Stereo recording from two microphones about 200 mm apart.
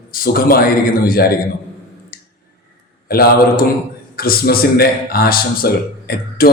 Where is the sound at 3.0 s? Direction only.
50° left (ahead or behind).